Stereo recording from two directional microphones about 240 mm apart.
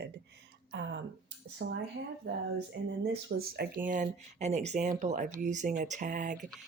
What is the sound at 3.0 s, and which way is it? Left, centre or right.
Speech, right.